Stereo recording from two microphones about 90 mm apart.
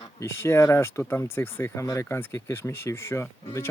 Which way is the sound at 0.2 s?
30° left (ahead or behind).